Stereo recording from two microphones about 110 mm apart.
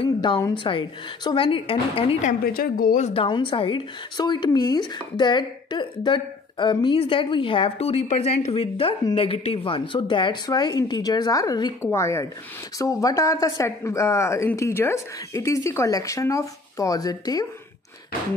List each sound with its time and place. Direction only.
0.0 s a sound: 45° left (ahead or behind)
0.7 s speech: 50° left (ahead or behind)
11.8 s speech: 25° left (ahead or behind)